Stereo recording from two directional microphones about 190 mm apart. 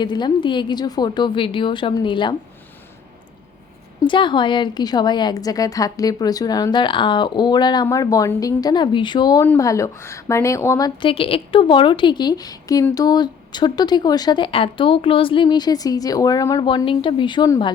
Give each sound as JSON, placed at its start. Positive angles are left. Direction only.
{"t": 0.0, "sound": "a woman's voice", "side_deg": 25}
{"t": 4.0, "sound": "a woman's voice", "side_deg": 25}